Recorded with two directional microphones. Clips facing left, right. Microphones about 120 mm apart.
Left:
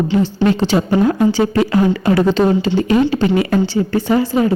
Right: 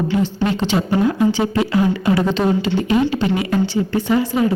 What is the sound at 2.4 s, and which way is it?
A woman's voice, 35° left (ahead or behind).